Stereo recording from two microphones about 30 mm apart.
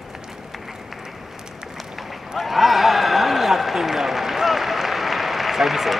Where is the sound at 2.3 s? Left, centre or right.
Centre.